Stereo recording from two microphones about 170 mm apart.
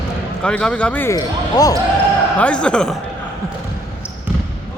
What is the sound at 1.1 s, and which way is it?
Speech, 20° left (ahead or behind).